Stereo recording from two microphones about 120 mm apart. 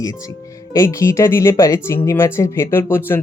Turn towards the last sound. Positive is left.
turn(degrees=20)  # may be behind; listen again after turning